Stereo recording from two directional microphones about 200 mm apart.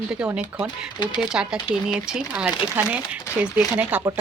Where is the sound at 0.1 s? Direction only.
5° right (ahead or behind).